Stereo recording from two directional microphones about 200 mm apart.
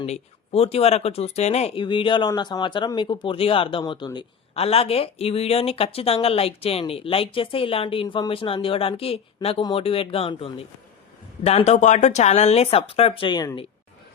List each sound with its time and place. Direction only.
0.0 s speech: 30° left (ahead or behind)